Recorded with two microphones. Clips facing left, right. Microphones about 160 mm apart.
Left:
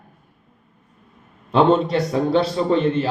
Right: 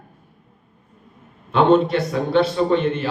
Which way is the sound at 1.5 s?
35° left (ahead or behind).